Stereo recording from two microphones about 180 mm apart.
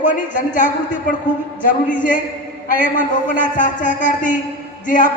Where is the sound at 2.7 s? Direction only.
45° left (ahead or behind).